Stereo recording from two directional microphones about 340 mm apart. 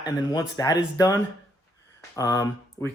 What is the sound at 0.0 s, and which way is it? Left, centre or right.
Speech, centre.